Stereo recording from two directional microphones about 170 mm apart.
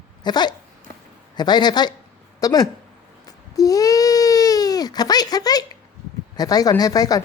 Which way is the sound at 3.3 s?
20° left (ahead or behind).